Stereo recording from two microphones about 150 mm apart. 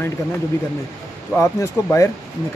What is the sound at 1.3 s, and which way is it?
Speech, 20° left (ahead or behind).